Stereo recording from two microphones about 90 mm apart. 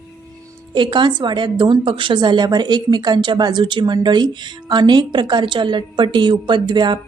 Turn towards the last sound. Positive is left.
turn(degrees=-55)  # may be behind; listen again after turning